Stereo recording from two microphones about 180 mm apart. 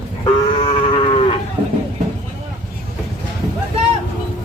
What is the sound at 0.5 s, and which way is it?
Moo, 30° left (ahead or behind).